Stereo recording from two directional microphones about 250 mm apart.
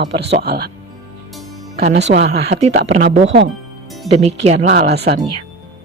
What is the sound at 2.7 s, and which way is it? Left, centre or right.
Speech, right.